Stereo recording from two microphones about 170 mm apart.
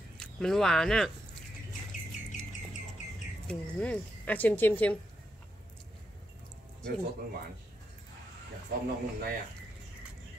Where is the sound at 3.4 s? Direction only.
5° left (ahead or behind).